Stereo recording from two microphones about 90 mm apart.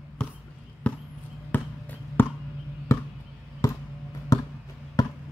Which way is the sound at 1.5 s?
20° left (ahead or behind).